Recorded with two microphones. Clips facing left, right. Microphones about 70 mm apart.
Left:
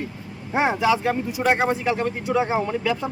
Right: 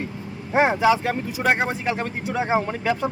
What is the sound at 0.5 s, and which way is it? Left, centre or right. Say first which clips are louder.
Speech: right 2 dB; right.